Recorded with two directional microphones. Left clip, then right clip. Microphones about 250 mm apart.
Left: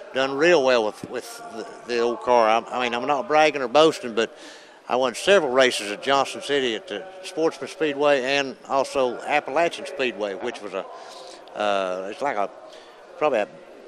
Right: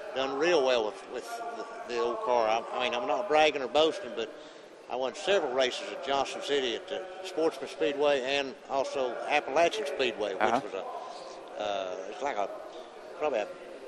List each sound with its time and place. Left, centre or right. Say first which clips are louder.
0.1 s a man's voice: left 8 dB; left
4.8 s a man's voice: left 10 dB; left
11.5 s speech: left 10 dB; left